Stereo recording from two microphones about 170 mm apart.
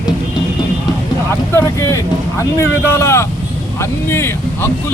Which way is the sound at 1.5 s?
15° left (ahead or behind).